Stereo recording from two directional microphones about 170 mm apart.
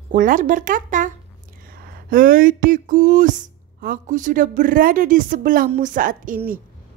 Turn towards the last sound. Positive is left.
turn(degrees=-55)  # may be behind; listen again after turning